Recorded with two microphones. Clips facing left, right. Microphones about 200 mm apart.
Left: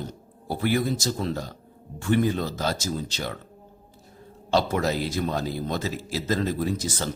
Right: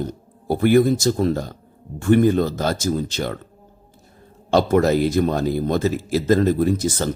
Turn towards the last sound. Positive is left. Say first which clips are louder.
# right 8 dB
turn(degrees=-50)  # may be behind; listen again after turning